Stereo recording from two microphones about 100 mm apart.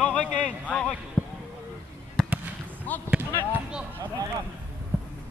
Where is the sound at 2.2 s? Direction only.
5° left (ahead or behind).